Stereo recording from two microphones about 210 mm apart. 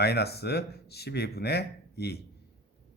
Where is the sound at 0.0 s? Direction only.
50° left (ahead or behind).